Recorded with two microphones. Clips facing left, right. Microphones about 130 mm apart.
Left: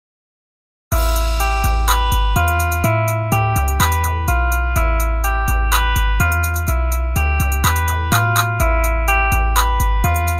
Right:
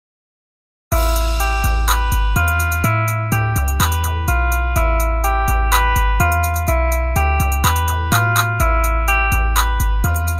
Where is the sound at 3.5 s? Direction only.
Centre (ahead or behind).